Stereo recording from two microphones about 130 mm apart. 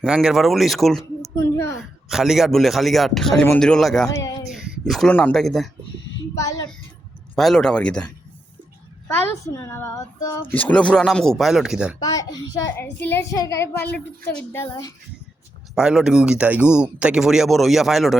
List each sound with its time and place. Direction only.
0.0 s speech: 5° right (ahead or behind)
1.2 s a woman's voice: 20° left (ahead or behind)
1.8 s speech: 5° right (ahead or behind)
4.5 s a sound: centre (ahead or behind)
5.1 s speech: 5° left (ahead or behind)
7.3 s a woman's voice: 5° left (ahead or behind)
11.9 s a child's voice: 30° left (ahead or behind)
12.7 s a child's voice: 15° left (ahead or behind)
15.7 s speech: 5° right (ahead or behind)